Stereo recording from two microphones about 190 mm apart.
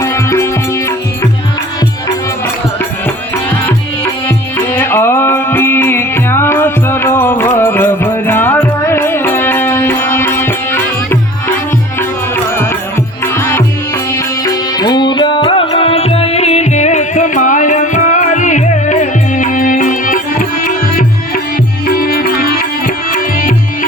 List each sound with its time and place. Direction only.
0.0 s music: 15° left (ahead or behind)
3.7 s music: 10° left (ahead or behind)
14.4 s music: 20° left (ahead or behind); by 22.6 s 50° left (ahead or behind)